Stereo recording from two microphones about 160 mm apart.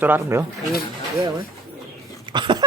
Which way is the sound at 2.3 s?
30° right (ahead or behind).